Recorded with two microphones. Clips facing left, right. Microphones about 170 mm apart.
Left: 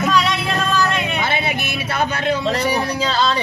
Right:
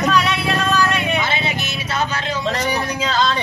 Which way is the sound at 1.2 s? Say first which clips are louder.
Left 1 dB; 55° left (ahead or behind).